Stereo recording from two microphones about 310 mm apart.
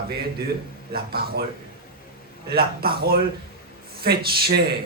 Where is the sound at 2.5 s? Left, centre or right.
Right.